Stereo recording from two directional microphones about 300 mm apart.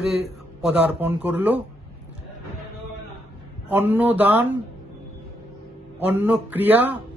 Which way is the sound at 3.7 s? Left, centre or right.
Centre.